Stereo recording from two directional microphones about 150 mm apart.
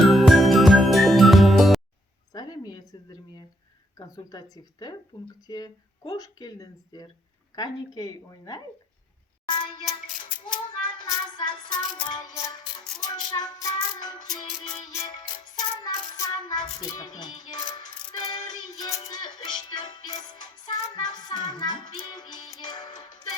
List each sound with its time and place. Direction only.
0.0 s music: centre (ahead or behind)
2.3 s a sound: 25° left (ahead or behind)
3.9 s music: 25° left (ahead or behind)
9.5 s child singing: 30° left (ahead or behind)
12.0 s music: 25° left (ahead or behind)